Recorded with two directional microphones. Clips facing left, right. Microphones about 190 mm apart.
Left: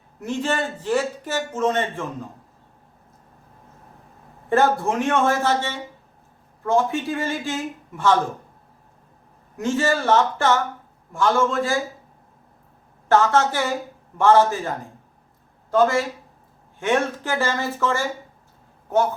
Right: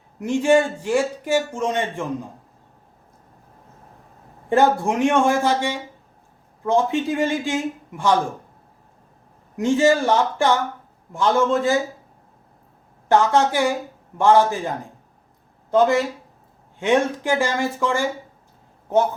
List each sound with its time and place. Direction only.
0.2 s speech: 15° right (ahead or behind)
4.4 s speech: 15° right (ahead or behind)
9.6 s a man's voice: 15° right (ahead or behind)
13.1 s speech: 15° right (ahead or behind)
15.7 s a man's voice: 20° right (ahead or behind)